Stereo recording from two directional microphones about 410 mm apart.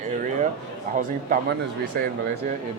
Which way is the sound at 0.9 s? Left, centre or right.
Centre.